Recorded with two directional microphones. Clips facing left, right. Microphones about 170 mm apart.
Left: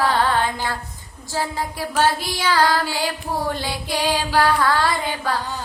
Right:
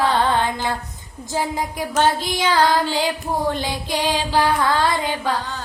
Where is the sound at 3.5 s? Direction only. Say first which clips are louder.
Right 2 dB; 20° right (ahead or behind).